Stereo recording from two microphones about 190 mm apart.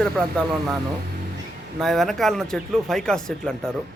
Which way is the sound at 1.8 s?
Centre (ahead or behind).